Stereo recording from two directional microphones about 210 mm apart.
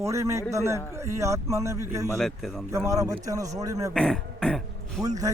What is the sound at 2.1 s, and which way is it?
Speech, centre (ahead or behind).